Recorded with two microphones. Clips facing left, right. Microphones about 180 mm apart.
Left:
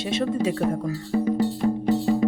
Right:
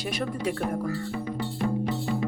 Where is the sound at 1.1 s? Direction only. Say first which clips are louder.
Left 9 dB; 35° left (ahead or behind).